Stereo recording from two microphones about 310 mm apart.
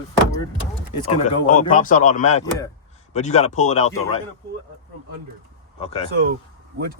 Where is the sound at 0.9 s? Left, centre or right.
Left.